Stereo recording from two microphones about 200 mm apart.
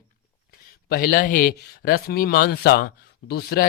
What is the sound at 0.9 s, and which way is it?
Speech, 45° left (ahead or behind).